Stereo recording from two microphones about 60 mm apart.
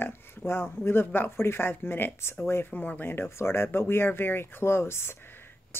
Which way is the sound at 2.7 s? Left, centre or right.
Left.